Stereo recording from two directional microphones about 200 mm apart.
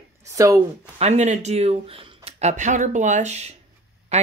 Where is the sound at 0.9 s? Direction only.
35° right (ahead or behind).